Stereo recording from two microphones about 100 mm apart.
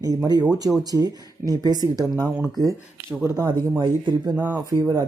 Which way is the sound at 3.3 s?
45° right (ahead or behind).